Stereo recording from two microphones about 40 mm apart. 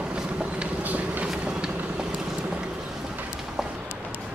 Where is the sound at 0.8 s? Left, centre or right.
Right.